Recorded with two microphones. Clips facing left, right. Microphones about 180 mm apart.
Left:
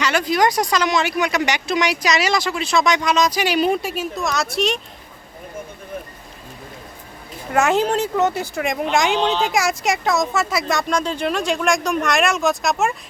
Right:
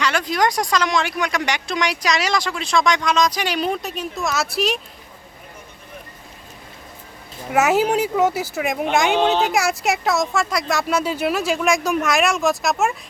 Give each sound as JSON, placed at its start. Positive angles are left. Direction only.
{"t": 0.0, "sound": "speech", "side_deg": 0}
{"t": 7.5, "sound": "speech", "side_deg": -5}
{"t": 9.1, "sound": "speech", "side_deg": -55}
{"t": 9.4, "sound": "speech", "side_deg": 0}